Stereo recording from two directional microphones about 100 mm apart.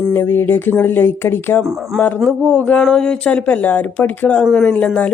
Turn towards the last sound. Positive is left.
turn(degrees=15)  # may be behind; listen again after turning